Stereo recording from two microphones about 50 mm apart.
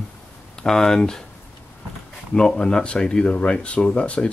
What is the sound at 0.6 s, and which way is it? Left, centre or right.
Speech, centre.